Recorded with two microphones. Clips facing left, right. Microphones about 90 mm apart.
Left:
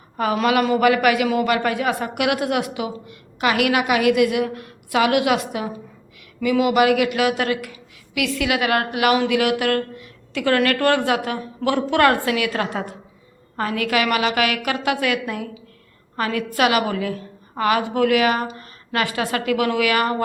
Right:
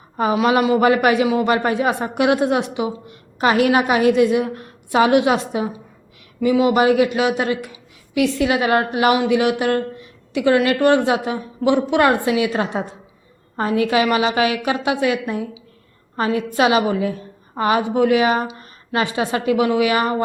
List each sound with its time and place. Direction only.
0.2 s a woman's voice: 25° right (ahead or behind)